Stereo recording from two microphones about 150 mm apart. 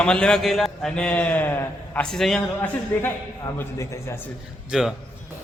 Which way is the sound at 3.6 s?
15° left (ahead or behind).